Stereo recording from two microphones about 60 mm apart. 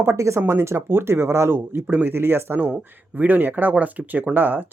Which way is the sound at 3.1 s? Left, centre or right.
Right.